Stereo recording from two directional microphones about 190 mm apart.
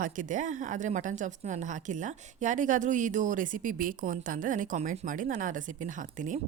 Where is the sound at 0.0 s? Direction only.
45° right (ahead or behind).